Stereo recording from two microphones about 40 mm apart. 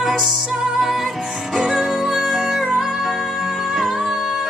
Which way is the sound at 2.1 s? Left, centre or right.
Centre.